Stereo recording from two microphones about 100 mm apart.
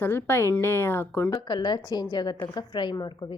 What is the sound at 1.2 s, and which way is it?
Speech, 40° left (ahead or behind).